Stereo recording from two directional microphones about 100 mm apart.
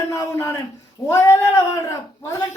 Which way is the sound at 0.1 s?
30° left (ahead or behind).